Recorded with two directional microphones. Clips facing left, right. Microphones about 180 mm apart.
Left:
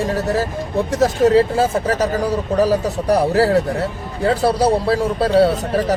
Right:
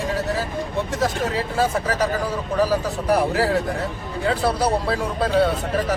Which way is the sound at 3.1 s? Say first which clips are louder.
Left 5 dB; 40° left (ahead or behind).